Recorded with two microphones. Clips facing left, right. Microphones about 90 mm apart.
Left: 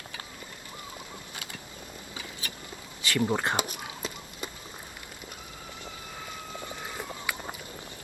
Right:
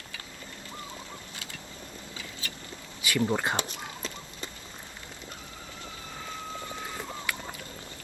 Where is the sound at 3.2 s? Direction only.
15° left (ahead or behind).